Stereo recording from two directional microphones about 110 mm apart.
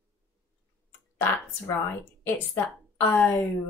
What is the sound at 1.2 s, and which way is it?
Speech, 20° left (ahead or behind).